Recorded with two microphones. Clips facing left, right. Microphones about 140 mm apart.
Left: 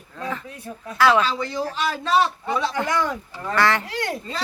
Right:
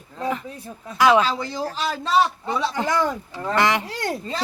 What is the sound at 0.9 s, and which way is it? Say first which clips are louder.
Speech: right 1 dB; 20° right (ahead or behind).